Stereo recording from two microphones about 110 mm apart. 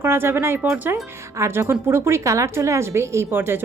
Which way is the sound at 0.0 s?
20° right (ahead or behind).